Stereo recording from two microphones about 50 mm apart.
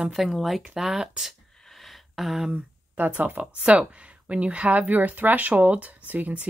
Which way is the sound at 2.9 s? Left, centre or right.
Right.